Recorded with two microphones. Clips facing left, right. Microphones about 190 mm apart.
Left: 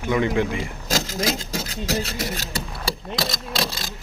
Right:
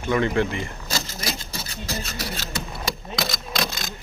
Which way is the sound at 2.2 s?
20° left (ahead or behind).